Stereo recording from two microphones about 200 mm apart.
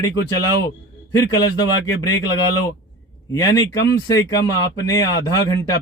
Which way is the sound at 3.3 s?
20° left (ahead or behind).